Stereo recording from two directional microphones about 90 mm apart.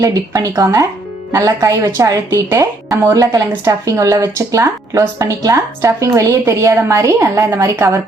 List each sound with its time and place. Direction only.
0.5 s a woman's voice: 40° right (ahead or behind)